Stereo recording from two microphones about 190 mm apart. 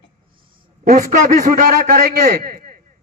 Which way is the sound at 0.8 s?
40° right (ahead or behind).